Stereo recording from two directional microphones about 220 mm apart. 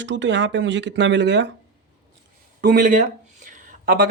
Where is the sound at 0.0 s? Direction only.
55° right (ahead or behind).